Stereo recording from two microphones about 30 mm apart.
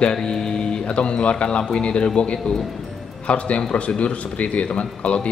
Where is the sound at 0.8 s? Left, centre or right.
Left.